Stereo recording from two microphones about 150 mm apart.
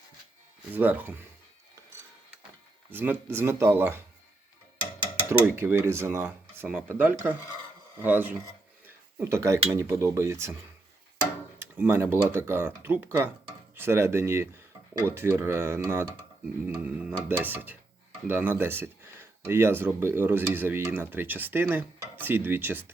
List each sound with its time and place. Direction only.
0.7 s speech: 10° right (ahead or behind)
2.9 s speech: 10° right (ahead or behind)
5.3 s speech: 15° right (ahead or behind)
11.6 s speech: 15° right (ahead or behind)